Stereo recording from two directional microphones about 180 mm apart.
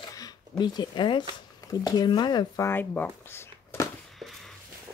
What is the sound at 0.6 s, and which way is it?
Speech, 25° left (ahead or behind).